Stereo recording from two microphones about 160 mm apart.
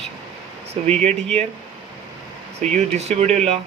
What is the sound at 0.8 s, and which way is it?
Speech, 40° right (ahead or behind).